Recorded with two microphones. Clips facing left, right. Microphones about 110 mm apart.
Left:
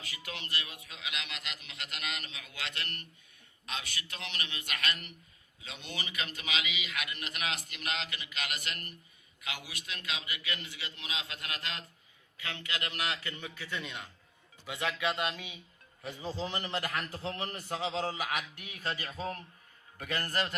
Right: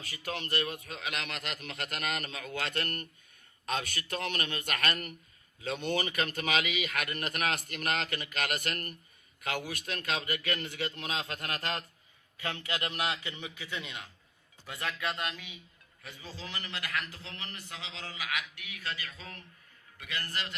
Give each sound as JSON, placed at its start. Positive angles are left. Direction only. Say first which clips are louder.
{"t": 0.0, "sound": "a man's voice", "louder": "right 6 dB", "side_deg": -45}
{"t": 13.2, "sound": "a man's voice", "louder": "even", "side_deg": -15}
{"t": 15.1, "sound": "speech", "louder": "left 3 dB", "side_deg": 20}
{"t": 16.0, "sound": "a man's voice", "louder": "left 8 dB", "side_deg": 35}